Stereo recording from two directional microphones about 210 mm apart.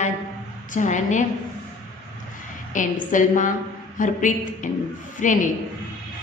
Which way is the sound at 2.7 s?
35° left (ahead or behind).